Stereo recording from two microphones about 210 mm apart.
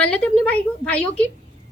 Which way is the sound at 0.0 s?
5° left (ahead or behind).